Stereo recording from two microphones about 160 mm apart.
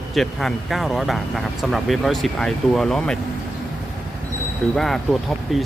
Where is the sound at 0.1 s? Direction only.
Centre (ahead or behind).